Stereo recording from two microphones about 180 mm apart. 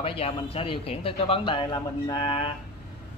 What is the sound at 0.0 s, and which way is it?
Speech, 35° left (ahead or behind).